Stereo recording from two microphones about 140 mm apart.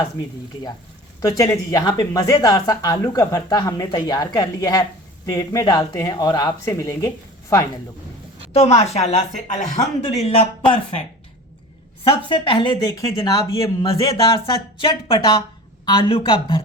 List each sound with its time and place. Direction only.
1.2 s speech: 25° left (ahead or behind)
8.5 s speech: 50° left (ahead or behind)
12.0 s speech: 35° left (ahead or behind)
12.9 s speech: 25° left (ahead or behind); by 16.6 s 40° left (ahead or behind)